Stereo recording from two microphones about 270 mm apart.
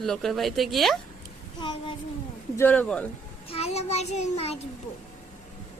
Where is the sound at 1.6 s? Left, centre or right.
Centre.